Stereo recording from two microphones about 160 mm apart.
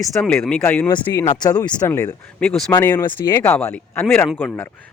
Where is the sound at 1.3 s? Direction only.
25° left (ahead or behind).